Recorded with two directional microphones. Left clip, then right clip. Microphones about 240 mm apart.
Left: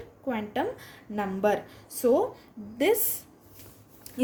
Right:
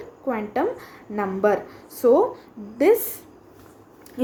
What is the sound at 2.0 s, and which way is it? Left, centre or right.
Speech, left.